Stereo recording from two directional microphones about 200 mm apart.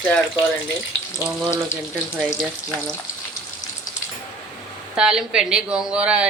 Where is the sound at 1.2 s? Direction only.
5° right (ahead or behind).